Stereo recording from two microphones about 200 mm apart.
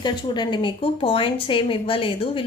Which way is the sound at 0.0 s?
20° left (ahead or behind).